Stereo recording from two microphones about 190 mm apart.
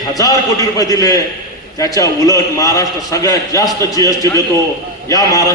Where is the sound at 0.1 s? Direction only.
20° left (ahead or behind).